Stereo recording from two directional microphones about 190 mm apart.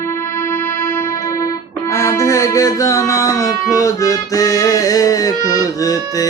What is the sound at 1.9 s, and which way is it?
Music, 15° left (ahead or behind).